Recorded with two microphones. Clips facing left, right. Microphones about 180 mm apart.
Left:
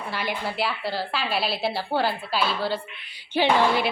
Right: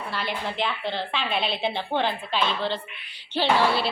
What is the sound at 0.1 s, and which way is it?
A woman's voice, 10° left (ahead or behind).